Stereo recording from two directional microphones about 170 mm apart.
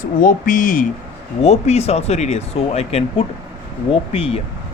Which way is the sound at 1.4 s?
40° left (ahead or behind).